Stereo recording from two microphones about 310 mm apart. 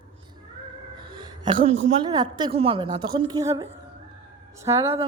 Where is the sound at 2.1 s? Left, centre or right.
Centre.